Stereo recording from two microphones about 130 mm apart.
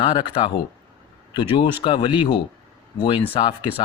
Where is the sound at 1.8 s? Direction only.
45° left (ahead or behind).